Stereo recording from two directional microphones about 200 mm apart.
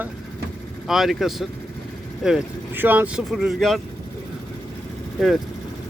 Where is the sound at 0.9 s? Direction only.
Centre (ahead or behind).